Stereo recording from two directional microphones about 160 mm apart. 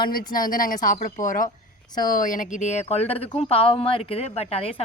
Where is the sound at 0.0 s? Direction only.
65° left (ahead or behind).